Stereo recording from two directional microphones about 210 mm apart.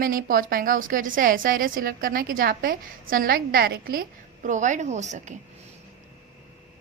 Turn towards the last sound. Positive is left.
turn(degrees=-35)  # may be behind; listen again after turning